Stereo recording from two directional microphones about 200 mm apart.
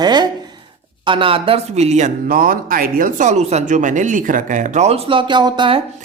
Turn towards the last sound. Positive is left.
turn(degrees=-25)  # may be behind; listen again after turning